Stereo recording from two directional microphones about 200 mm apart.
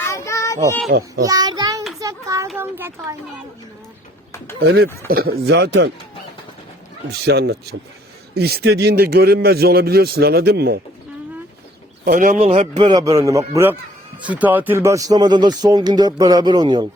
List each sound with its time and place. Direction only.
0.0 s child singing: 15° left (ahead or behind)
0.9 s a man's voice: 50° right (ahead or behind)
1.2 s child singing: 20° right (ahead or behind)
2.0 s a sound: 15° right (ahead or behind)
2.6 s speech: 10° right (ahead or behind)
4.6 s speech: 55° right (ahead or behind)
7.1 s a man's voice: 55° right (ahead or behind)
12.0 s speech: 40° right (ahead or behind); by 16.8 s 20° right (ahead or behind)